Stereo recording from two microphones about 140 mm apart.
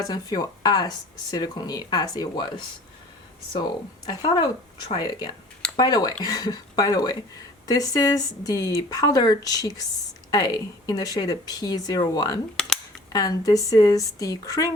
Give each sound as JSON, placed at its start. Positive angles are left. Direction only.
{"t": 0.1, "sound": "speech", "side_deg": 25}
{"t": 4.0, "sound": "speech", "side_deg": 30}
{"t": 12.5, "sound": "camera", "side_deg": 5}
{"t": 13.1, "sound": "speech", "side_deg": 25}